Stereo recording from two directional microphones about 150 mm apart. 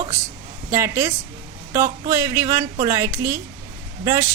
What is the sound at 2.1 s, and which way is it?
A woman's voice, 20° right (ahead or behind).